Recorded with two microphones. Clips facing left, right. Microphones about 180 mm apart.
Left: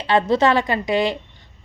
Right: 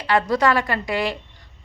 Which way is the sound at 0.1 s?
25° left (ahead or behind).